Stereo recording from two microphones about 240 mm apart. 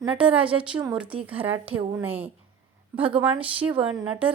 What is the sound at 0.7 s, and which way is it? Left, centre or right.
Speech, centre.